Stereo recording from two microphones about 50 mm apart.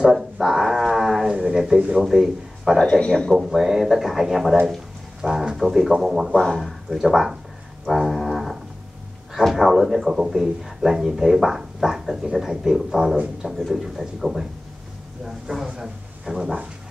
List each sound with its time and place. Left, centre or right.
0.0 s a sound: centre
2.0 s a man's voice: centre
2.8 s speech: centre
3.3 s speech: centre
5.2 s speech: centre
5.6 s speech: centre
6.3 s speech: centre
6.6 s speech: centre
7.8 s music: centre
9.3 s speech: centre